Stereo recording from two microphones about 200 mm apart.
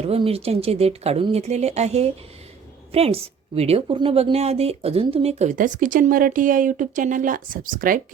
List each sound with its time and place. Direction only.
0.0 s a woman's voice: 30° right (ahead or behind)